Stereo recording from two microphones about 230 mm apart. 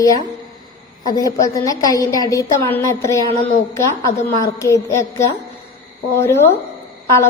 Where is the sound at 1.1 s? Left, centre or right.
Centre.